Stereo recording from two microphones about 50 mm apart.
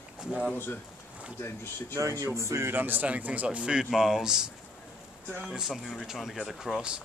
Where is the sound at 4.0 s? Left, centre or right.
Centre.